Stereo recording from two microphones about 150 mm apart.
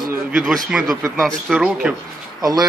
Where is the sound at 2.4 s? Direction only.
25° right (ahead or behind).